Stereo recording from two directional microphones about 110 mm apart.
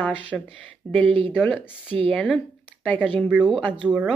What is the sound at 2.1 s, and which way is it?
Speech, 5° left (ahead or behind).